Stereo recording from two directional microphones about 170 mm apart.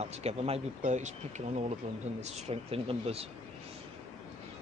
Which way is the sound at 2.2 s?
40° right (ahead or behind).